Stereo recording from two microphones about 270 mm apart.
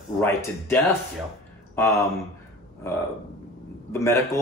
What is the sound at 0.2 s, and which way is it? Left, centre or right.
Speech, centre.